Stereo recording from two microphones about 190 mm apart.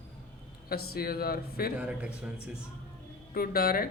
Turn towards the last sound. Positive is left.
turn(degrees=50)  # may be behind; listen again after turning